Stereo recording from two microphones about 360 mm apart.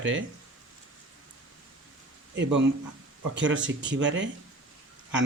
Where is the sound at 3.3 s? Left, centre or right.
Right.